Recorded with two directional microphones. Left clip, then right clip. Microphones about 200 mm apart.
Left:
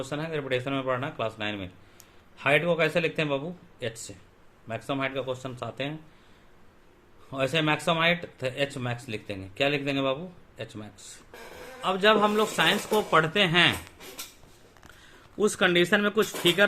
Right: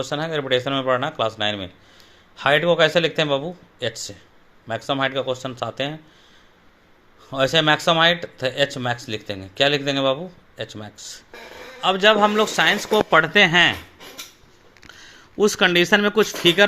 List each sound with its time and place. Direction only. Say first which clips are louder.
0.0 s speech: right 8 dB; 35° right (ahead or behind)
7.3 s speech: right 8 dB; 35° right (ahead or behind)
15.4 s speech: right 6 dB; 35° right (ahead or behind)